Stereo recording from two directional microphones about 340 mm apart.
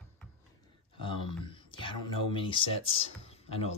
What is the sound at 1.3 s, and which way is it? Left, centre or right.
Speech, centre.